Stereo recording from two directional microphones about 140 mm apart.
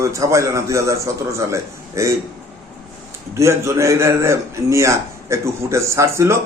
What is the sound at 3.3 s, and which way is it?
A man's voice, 20° right (ahead or behind).